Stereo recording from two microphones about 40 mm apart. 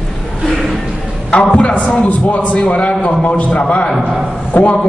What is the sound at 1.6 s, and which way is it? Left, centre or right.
Speech, left.